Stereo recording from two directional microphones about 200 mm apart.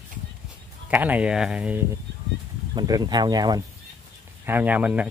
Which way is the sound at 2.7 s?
20° right (ahead or behind).